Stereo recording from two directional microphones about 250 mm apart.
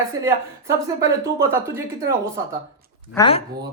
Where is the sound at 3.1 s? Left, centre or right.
Centre.